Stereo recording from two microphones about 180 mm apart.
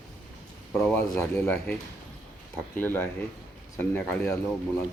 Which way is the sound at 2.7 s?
10° left (ahead or behind).